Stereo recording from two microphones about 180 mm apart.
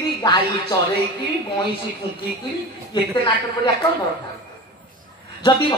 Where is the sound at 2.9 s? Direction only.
25° left (ahead or behind).